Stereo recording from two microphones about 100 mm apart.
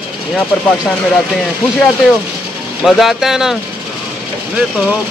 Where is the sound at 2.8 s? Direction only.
Centre (ahead or behind).